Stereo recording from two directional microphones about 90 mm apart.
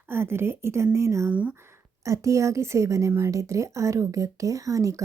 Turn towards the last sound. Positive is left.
turn(degrees=-35)  # may be behind; listen again after turning